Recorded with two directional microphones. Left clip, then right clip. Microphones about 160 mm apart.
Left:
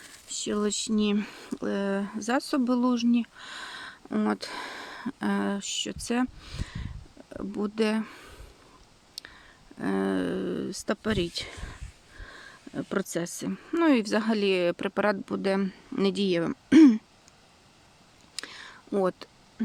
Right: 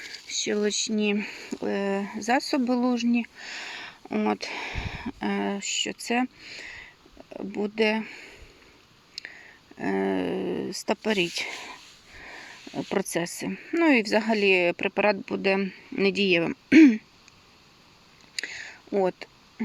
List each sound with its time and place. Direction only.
0.7 s speech: 30° left (ahead or behind)
9.2 s a sound: 35° left (ahead or behind)
9.7 s speech: 30° left (ahead or behind)
12.2 s wheeze: 10° left (ahead or behind)
12.9 s speech: 15° left (ahead or behind); by 17.0 s 30° left (ahead or behind)
18.3 s whispering: 30° left (ahead or behind)